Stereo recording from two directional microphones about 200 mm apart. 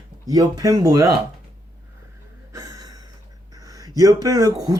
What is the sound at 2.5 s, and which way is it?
Gasp, 20° right (ahead or behind).